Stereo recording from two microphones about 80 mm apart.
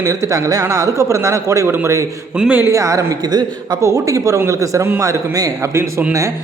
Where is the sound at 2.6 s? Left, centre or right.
Right.